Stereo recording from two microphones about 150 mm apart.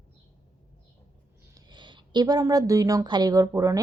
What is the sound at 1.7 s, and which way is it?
A woman's voice, 30° right (ahead or behind).